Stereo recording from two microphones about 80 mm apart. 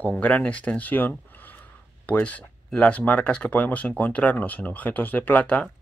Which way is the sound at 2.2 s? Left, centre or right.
Centre.